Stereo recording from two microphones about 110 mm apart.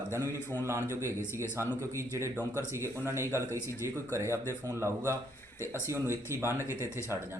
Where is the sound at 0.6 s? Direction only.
25° right (ahead or behind).